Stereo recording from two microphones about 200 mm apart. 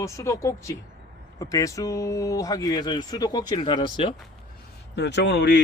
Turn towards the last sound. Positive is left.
turn(degrees=60)  # may be behind; listen again after turning